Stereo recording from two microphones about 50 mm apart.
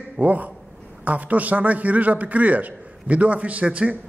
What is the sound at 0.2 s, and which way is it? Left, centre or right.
A man's voice, right.